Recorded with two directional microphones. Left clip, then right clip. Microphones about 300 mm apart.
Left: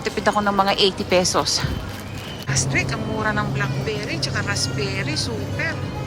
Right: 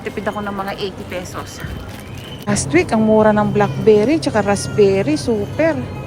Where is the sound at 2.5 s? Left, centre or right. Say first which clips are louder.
Right 7 dB; centre.